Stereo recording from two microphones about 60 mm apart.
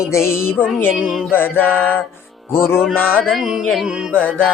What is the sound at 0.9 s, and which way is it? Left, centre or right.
Music, centre.